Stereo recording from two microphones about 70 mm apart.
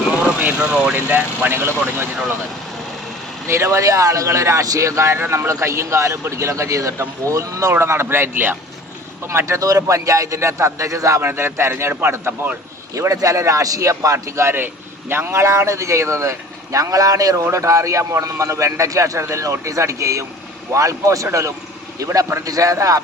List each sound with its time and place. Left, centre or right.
0.3 s speech: right
0.7 s speech: centre
0.9 s a man's voice: right
3.4 s a man's voice: right
7.7 s a man's voice: right
9.6 s a man's voice: right
11.2 s a man's voice: right
12.9 s a man's voice: right
17.4 s a man's voice: right